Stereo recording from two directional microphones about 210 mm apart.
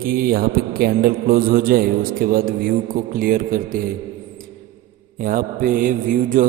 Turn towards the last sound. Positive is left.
turn(degrees=-40)  # may be behind; listen again after turning